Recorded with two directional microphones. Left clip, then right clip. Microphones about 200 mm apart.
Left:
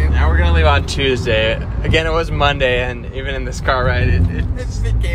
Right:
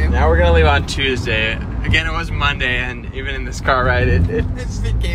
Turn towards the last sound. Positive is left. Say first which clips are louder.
# right 4 dB
turn(degrees=-10)  # may be behind; listen again after turning